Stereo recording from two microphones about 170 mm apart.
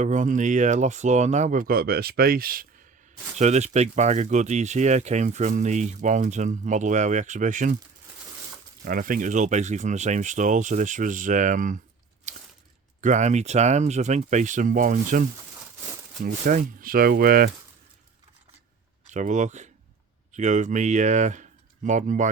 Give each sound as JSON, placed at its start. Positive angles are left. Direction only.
{"t": 0.0, "sound": "speech", "side_deg": -50}
{"t": 3.3, "sound": "speech", "side_deg": -40}
{"t": 8.8, "sound": "speech", "side_deg": -55}
{"t": 13.0, "sound": "speech", "side_deg": -45}
{"t": 16.2, "sound": "speech", "side_deg": -55}
{"t": 19.0, "sound": "speech", "side_deg": -45}